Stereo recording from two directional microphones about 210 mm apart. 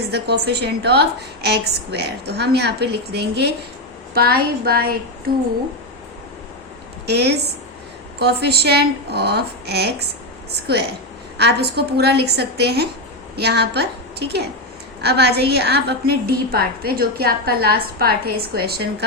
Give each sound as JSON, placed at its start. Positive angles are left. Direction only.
{"t": 0.1, "sound": "a woman's voice", "side_deg": -50}
{"t": 7.1, "sound": "a woman's voice", "side_deg": -50}